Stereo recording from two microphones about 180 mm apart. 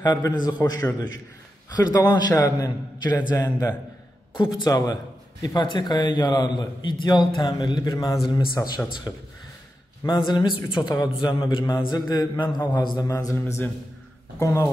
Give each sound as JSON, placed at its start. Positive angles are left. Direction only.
{"t": 0.0, "sound": "a man's voice", "side_deg": 20}